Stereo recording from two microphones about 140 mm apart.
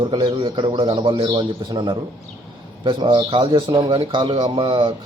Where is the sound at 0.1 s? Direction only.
35° right (ahead or behind).